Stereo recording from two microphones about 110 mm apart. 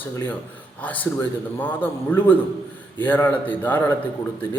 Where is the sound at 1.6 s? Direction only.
15° left (ahead or behind).